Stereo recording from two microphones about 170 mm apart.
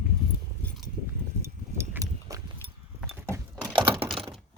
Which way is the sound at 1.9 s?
20° right (ahead or behind).